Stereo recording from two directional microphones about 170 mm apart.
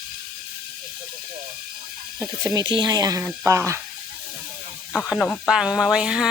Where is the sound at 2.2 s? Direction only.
20° right (ahead or behind).